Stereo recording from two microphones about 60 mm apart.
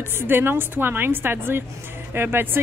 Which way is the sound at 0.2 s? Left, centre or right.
Right.